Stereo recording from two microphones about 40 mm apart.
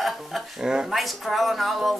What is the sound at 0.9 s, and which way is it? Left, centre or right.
Speech, centre.